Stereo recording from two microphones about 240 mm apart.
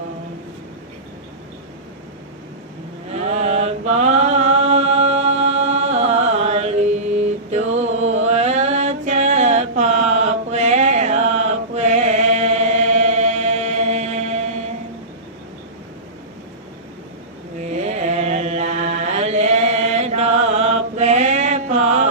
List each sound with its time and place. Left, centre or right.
3.1 s mantra: right
17.6 s mantra: right